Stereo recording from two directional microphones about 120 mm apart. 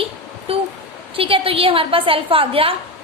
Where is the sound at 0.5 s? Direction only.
50° right (ahead or behind).